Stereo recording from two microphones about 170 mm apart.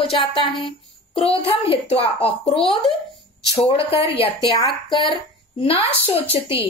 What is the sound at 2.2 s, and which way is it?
Speech, 35° left (ahead or behind).